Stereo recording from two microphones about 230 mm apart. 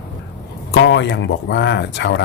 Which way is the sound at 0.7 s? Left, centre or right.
Left.